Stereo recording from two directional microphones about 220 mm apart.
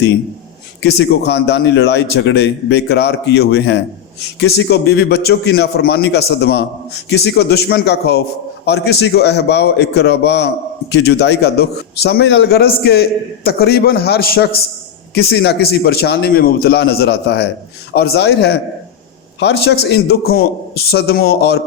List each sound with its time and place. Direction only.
0.8 s speech: 50° left (ahead or behind)